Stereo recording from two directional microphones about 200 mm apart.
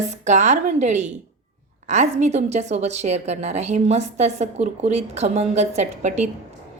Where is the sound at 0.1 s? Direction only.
35° right (ahead or behind).